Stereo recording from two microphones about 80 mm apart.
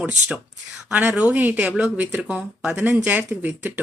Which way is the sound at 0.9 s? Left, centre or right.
Centre.